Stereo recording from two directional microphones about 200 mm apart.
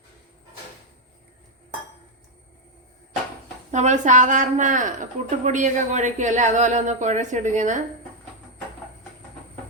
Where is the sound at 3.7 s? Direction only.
35° right (ahead or behind).